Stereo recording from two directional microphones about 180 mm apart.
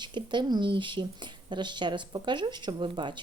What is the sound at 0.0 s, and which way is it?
Speech, 25° right (ahead or behind).